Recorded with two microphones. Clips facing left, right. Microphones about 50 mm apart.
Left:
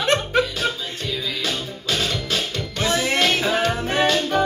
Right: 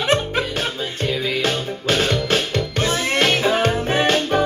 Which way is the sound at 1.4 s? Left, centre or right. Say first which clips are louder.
Right 5 dB; right.